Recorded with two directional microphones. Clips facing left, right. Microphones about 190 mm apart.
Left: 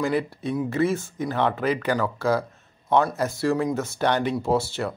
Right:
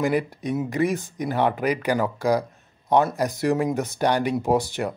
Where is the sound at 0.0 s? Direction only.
15° right (ahead or behind).